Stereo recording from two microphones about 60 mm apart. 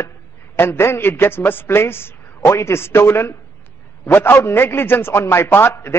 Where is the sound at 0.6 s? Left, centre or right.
Left.